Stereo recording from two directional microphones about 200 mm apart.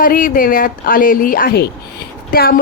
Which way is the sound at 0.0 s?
45° left (ahead or behind).